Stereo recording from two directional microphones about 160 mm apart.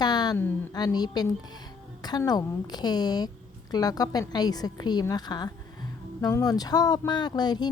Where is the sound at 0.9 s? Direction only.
25° left (ahead or behind).